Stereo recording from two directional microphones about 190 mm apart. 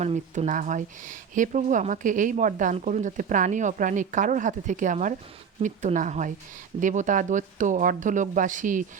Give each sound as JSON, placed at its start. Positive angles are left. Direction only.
{"t": 0.0, "sound": "speech", "side_deg": -40}